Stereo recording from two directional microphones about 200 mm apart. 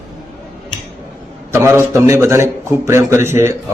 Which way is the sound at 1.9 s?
15° right (ahead or behind).